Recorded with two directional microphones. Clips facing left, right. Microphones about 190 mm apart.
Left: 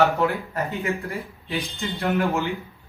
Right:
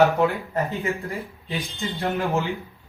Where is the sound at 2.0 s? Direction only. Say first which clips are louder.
Left 1 dB; 15° right (ahead or behind).